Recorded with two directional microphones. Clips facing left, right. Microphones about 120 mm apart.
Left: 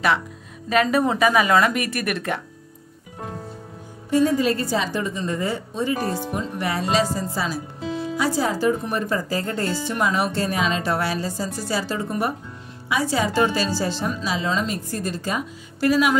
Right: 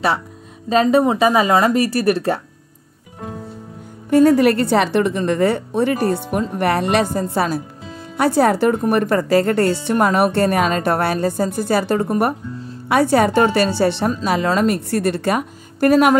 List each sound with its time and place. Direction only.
0.7 s speech: 30° right (ahead or behind)
4.1 s a woman's voice: 65° right (ahead or behind)